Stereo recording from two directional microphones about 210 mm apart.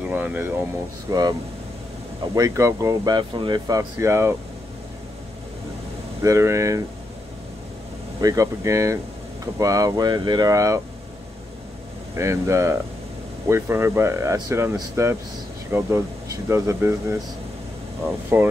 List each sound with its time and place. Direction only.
0.1 s speech: 10° right (ahead or behind)
2.3 s speech: 15° right (ahead or behind)
6.2 s speech: 15° right (ahead or behind)
8.2 s speech: 15° right (ahead or behind)
12.2 s speech: 15° right (ahead or behind)
18.3 s speech: 10° right (ahead or behind)